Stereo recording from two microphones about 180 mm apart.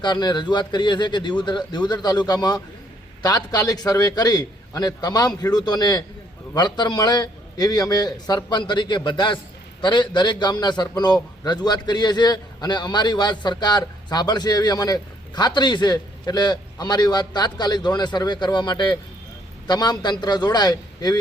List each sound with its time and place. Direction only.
0.0 s a man's voice: 25° left (ahead or behind)